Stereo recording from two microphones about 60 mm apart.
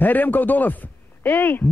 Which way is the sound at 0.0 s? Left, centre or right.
Left.